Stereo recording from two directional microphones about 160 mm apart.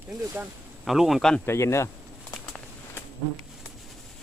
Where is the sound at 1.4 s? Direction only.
15° left (ahead or behind).